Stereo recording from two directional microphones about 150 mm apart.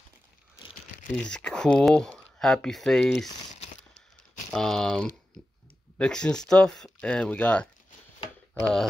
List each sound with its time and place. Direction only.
1.1 s speech: 5° left (ahead or behind)
4.5 s speech: 5° left (ahead or behind)